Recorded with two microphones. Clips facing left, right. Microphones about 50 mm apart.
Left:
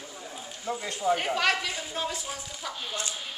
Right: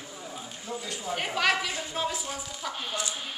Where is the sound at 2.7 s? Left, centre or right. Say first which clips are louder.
Right 1 dB; right.